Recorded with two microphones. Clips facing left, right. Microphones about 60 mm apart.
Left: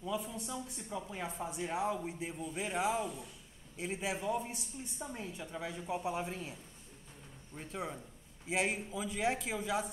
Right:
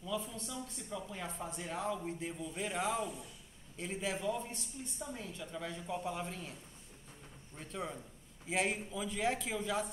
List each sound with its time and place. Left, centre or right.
0.1 s a woman's voice: centre
7.5 s speech: centre